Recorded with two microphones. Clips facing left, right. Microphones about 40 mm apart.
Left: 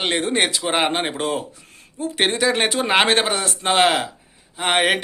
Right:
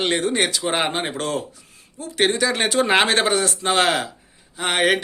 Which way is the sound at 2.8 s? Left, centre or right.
Centre.